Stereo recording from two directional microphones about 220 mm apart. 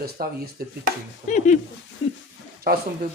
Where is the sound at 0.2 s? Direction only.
45° right (ahead or behind).